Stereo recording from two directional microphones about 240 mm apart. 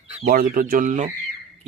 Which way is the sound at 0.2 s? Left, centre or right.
Right.